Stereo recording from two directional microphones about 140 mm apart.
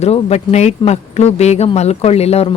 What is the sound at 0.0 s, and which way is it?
Speech, 50° left (ahead or behind).